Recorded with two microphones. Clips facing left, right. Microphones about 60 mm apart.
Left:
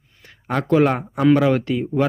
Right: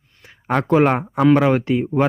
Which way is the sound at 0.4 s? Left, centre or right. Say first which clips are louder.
Right 1 dB; right.